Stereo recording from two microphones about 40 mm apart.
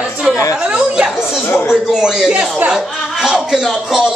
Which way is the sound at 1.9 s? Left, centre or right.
Centre.